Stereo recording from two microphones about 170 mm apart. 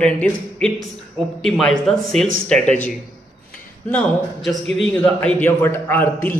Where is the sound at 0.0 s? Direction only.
5° left (ahead or behind).